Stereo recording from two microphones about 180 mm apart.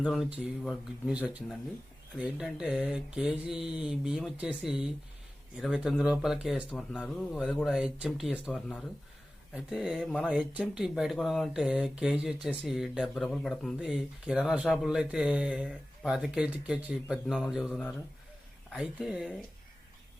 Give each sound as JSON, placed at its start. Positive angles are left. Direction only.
{"t": 0.0, "sound": "speech", "side_deg": 0}
{"t": 6.7, "sound": "speech", "side_deg": 5}
{"t": 10.3, "sound": "speech", "side_deg": -5}